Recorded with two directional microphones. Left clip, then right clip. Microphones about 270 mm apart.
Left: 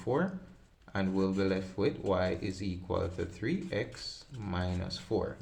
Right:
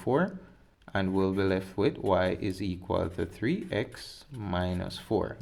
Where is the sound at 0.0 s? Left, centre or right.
Right.